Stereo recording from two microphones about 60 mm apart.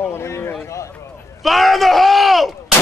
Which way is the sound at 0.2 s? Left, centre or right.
Left.